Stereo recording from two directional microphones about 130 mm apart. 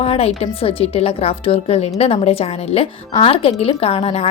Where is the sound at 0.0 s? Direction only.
50° left (ahead or behind).